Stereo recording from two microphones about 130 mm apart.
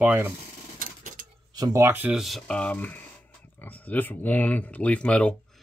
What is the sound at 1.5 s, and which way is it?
Speech, 25° right (ahead or behind).